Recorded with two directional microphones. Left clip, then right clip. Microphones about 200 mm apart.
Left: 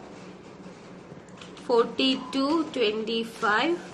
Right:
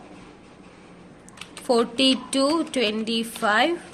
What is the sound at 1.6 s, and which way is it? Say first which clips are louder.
A woman's voice: right 3 dB; 50° right (ahead or behind).